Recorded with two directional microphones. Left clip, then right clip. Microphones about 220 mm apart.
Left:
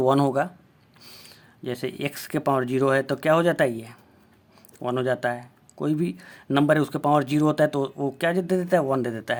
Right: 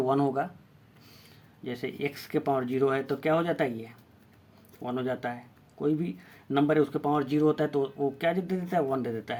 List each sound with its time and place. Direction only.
0.0 s speech: 40° left (ahead or behind)